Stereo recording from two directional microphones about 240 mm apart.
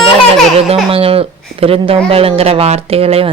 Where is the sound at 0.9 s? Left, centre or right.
Right.